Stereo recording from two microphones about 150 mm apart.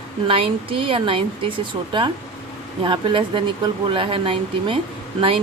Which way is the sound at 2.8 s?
35° right (ahead or behind).